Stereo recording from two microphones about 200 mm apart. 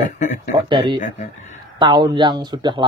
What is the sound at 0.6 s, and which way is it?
Speech, 25° right (ahead or behind).